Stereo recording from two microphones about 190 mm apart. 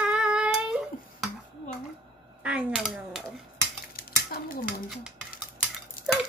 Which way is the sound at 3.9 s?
50° left (ahead or behind).